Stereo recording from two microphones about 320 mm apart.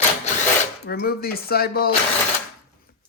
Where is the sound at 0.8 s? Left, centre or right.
Left.